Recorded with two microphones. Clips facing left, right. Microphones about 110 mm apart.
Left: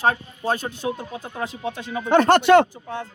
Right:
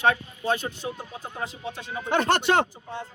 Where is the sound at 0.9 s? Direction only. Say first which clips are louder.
Left 7 dB; 80° left.